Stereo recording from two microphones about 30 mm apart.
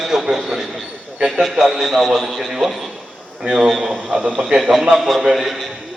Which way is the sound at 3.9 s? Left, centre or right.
Right.